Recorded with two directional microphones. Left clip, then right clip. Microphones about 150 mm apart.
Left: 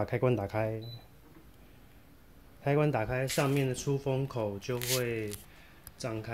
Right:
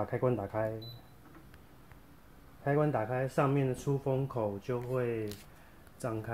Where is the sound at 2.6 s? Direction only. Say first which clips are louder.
Left 1 dB; 25° left (ahead or behind).